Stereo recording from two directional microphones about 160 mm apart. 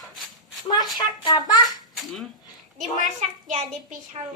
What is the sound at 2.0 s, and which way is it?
Dishes, centre (ahead or behind).